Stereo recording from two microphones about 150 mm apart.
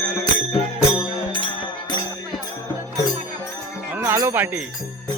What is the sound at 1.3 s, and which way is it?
Music, 30° left (ahead or behind).